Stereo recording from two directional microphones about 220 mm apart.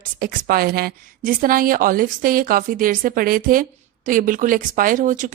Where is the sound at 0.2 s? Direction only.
40° right (ahead or behind).